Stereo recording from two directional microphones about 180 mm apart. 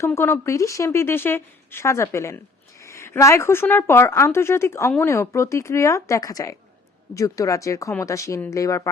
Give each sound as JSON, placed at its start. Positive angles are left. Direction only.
{"t": 0.0, "sound": "a woman's voice", "side_deg": 15}